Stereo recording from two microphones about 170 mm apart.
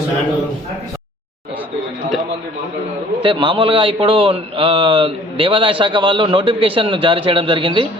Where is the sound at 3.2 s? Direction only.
30° right (ahead or behind).